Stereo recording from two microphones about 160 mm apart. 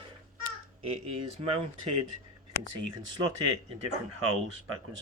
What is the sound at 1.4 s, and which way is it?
Speech, 35° right (ahead or behind).